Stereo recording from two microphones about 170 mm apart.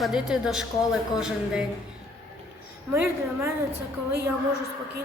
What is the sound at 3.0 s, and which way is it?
Speech, 15° right (ahead or behind).